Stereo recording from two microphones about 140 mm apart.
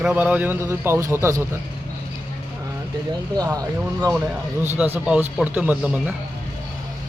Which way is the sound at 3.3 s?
25° right (ahead or behind).